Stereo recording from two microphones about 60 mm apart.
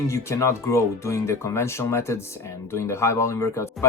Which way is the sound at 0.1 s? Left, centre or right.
Left.